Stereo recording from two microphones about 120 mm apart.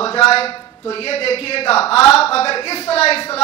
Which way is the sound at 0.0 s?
55° left (ahead or behind).